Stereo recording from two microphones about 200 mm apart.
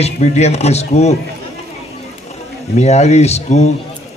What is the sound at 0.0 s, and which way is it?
A man's voice, 35° left (ahead or behind).